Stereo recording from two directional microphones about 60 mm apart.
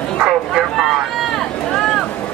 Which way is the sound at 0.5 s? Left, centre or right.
Centre.